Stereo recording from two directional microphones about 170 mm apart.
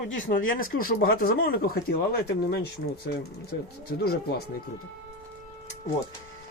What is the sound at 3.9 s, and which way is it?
Speech, 85° left.